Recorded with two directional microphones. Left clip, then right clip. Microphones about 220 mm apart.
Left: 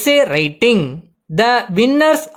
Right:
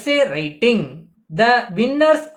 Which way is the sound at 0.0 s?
50° left (ahead or behind).